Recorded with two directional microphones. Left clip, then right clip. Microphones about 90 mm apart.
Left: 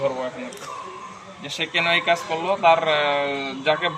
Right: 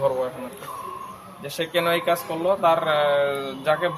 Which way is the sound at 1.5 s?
45° right (ahead or behind).